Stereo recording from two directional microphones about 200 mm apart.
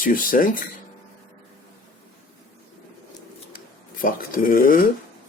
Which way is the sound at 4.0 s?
45° left (ahead or behind).